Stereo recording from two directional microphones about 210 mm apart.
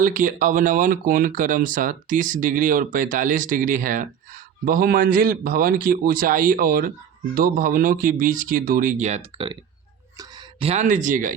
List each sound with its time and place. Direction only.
0.0 s speech: 40° right (ahead or behind)